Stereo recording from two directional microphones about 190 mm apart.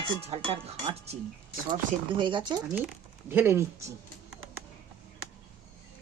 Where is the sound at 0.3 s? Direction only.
30° right (ahead or behind).